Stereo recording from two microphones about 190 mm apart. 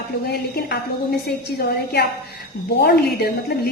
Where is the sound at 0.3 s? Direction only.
55° left (ahead or behind).